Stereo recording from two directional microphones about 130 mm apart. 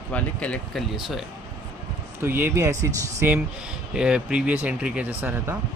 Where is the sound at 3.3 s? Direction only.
5° right (ahead or behind).